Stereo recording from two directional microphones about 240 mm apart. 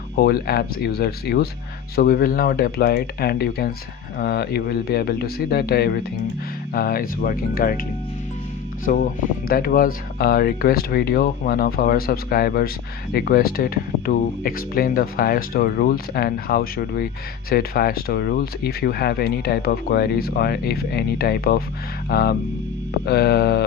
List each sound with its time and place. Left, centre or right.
0.2 s speech: left
8.9 s speech: left